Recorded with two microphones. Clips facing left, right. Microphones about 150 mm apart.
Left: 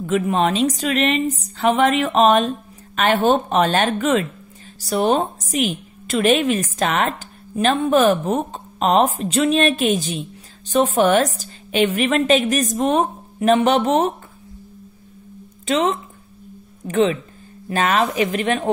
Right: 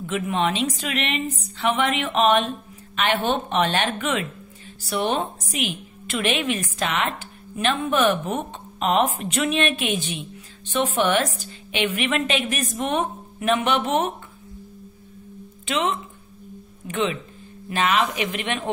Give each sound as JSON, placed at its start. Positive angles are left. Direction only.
{"t": 0.0, "sound": "a woman's voice", "side_deg": 40}
{"t": 15.6, "sound": "a woman's voice", "side_deg": 40}